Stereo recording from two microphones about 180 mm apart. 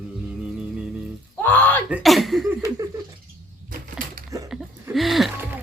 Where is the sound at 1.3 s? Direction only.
10° left (ahead or behind).